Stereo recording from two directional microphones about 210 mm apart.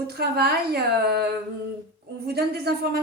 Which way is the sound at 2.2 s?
50° right (ahead or behind).